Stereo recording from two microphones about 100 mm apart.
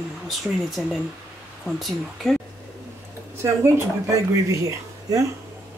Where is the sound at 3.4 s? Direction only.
25° right (ahead or behind).